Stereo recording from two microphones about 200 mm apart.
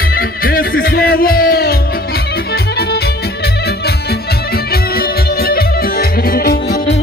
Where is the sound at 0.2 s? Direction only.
45° left (ahead or behind).